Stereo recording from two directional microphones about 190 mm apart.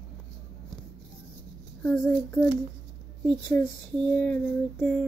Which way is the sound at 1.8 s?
Centre (ahead or behind).